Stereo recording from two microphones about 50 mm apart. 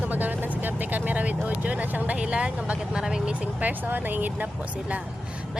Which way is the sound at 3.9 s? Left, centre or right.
Right.